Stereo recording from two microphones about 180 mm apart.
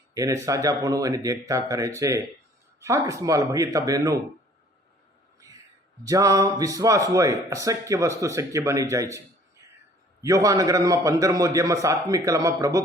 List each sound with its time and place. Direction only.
0.1 s a man's voice: 20° right (ahead or behind)
5.4 s music: 20° right (ahead or behind)
6.1 s a man's voice: 20° right (ahead or behind)